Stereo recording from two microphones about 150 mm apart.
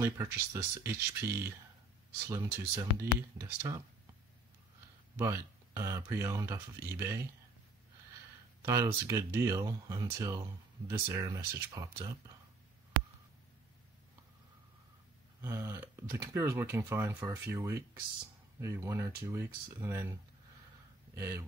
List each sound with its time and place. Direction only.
0.0 s speech: 15° right (ahead or behind)
5.1 s speech: 20° right (ahead or behind)
8.6 s speech: 20° right (ahead or behind)
15.4 s speech: 15° right (ahead or behind)
21.2 s speech: 20° right (ahead or behind)